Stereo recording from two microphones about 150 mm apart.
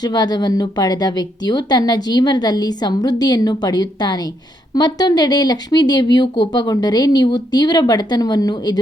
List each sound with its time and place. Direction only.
0.0 s a woman's voice: 25° left (ahead or behind)